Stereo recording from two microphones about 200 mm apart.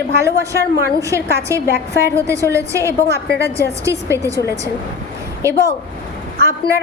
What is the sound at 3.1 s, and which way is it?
Speech, 55° left (ahead or behind).